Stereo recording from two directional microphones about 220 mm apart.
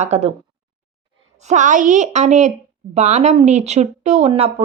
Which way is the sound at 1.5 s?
35° right (ahead or behind).